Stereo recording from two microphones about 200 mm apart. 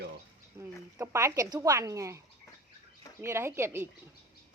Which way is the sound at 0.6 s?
15° right (ahead or behind).